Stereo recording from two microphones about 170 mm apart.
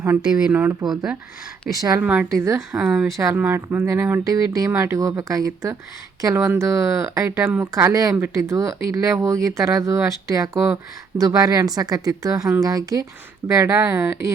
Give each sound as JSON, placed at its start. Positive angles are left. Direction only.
{"t": 0.2, "sound": "speech", "side_deg": -5}
{"t": 2.0, "sound": "speech", "side_deg": -10}
{"t": 3.2, "sound": "speech", "side_deg": -15}